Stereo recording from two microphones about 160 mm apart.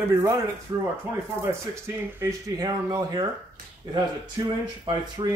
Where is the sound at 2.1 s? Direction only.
20° right (ahead or behind).